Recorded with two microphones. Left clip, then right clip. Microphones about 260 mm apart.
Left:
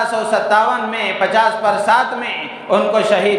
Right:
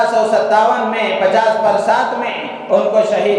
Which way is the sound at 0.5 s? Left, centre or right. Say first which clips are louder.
Right 2 dB; left.